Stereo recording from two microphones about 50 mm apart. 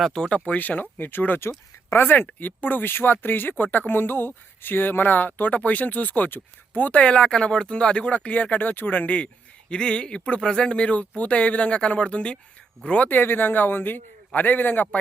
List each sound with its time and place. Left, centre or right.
0.1 s speech: centre
0.3 s speech: left
7.0 s speech: centre
13.1 s speech: left